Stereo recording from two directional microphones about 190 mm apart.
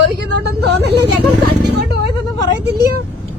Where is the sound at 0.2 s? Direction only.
60° right (ahead or behind).